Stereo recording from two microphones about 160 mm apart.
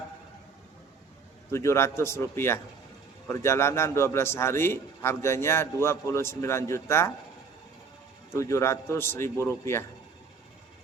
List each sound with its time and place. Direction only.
1.5 s a man's voice: 15° left (ahead or behind)
8.3 s a man's voice: 20° left (ahead or behind)